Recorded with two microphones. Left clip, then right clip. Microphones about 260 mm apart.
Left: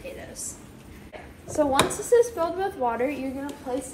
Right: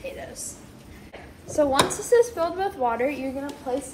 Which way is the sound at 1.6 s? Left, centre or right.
Centre.